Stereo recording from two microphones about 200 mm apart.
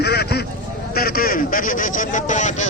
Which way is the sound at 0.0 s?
55° left (ahead or behind).